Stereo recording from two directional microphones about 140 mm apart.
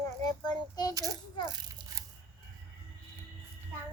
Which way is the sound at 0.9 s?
25° right (ahead or behind).